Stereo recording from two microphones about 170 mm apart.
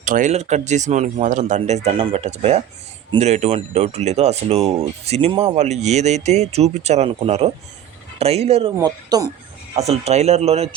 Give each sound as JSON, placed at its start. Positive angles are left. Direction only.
{"t": 0.0, "sound": "speech", "side_deg": -50}
{"t": 8.8, "sound": "speech", "side_deg": -20}
{"t": 9.7, "sound": "speech", "side_deg": -40}